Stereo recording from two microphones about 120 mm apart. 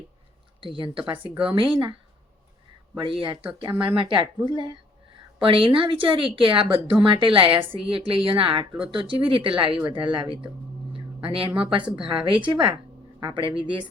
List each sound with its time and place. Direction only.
0.6 s speech: 45° right (ahead or behind)
3.0 s a woman's voice: 45° right (ahead or behind)